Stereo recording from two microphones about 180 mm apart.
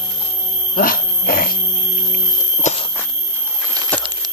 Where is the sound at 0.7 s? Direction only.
50° left (ahead or behind).